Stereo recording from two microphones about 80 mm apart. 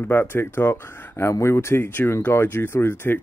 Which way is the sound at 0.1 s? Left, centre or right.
Left.